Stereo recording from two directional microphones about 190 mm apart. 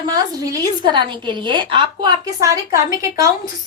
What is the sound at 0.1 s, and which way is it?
A woman's voice, 20° right (ahead or behind).